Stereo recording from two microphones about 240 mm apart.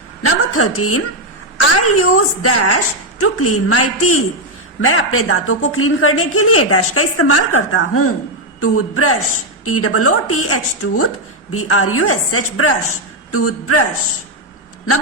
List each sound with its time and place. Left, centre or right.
0.2 s a woman's voice: left